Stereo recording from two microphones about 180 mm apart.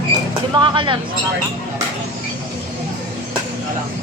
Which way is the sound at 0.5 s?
25° right (ahead or behind).